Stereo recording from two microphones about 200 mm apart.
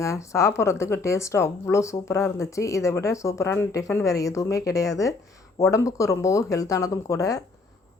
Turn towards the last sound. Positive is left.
turn(degrees=15)  # may be behind; listen again after turning